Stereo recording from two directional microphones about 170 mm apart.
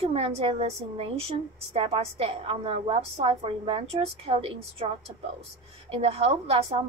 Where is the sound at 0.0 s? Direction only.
35° right (ahead or behind).